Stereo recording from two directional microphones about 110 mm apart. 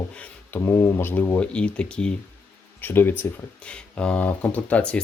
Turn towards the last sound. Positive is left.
turn(degrees=10)  # may be behind; listen again after turning